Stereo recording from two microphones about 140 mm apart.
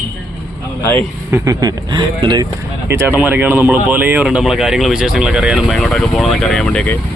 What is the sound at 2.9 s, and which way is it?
Speech, 15° right (ahead or behind).